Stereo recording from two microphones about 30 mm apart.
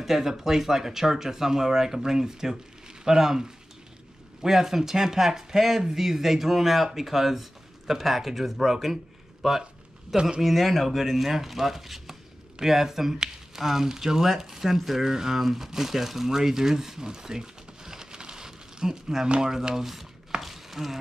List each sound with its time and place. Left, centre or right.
0.0 s speech: centre
17.0 s crumpling: right
19.4 s speech: right
19.7 s speech: centre
20.4 s a sound: centre